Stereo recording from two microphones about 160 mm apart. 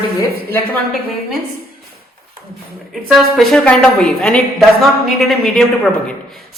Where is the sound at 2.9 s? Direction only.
Centre (ahead or behind).